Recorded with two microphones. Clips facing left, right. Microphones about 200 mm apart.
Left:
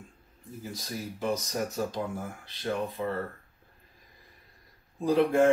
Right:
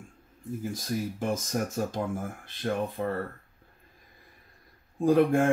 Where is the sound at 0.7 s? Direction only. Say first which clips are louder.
Right 3 dB; 50° right (ahead or behind).